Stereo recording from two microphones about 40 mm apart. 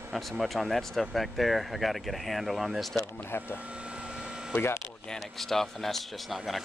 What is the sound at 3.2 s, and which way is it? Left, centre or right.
Speech, left.